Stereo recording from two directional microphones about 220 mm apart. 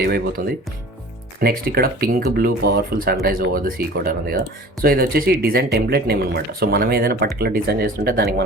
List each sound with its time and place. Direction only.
0.0 s speech: 45° right (ahead or behind)